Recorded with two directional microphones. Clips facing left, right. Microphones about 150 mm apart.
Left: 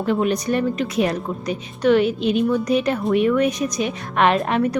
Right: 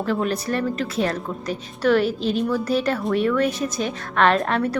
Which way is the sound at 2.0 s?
35° right (ahead or behind).